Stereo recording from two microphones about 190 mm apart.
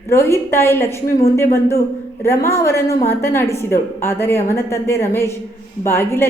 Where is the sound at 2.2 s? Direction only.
15° left (ahead or behind).